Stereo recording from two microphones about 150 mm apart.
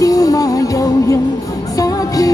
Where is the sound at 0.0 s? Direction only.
25° left (ahead or behind).